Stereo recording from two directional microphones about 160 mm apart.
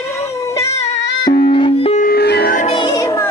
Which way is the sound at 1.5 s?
35° left (ahead or behind).